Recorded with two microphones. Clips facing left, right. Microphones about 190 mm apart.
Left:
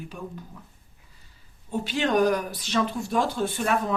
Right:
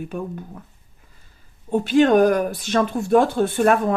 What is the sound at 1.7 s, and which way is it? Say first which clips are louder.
Speech: right 9 dB; 50° right (ahead or behind).